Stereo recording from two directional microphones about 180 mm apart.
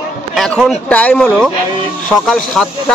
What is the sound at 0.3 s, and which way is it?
Speech, centre (ahead or behind).